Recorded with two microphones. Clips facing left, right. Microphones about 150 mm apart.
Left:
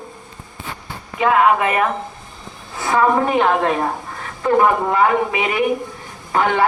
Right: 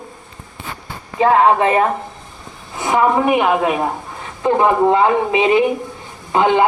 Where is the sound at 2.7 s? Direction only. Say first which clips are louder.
Right 1 dB; 15° right (ahead or behind).